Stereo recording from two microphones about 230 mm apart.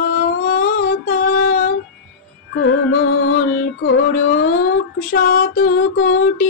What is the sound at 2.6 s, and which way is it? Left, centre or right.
Music, left.